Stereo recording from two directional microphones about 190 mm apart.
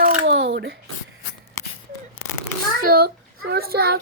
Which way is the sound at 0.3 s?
60° right (ahead or behind).